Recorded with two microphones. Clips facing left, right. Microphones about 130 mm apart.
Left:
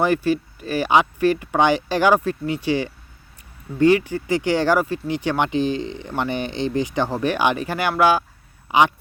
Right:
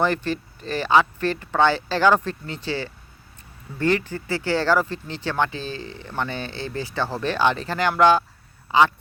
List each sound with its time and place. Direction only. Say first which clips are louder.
0.0 s speech: left 4 dB; 10° left (ahead or behind)